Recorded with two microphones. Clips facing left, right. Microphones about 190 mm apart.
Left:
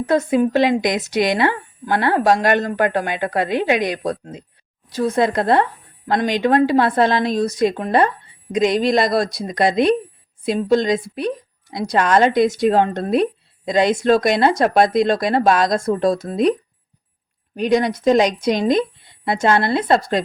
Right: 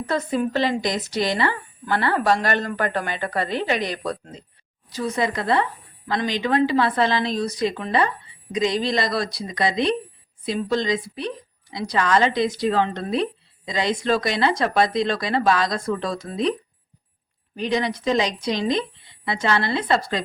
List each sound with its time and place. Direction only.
1.1 s a woman's voice: 55° left (ahead or behind)
17.6 s a woman's voice: 45° left (ahead or behind)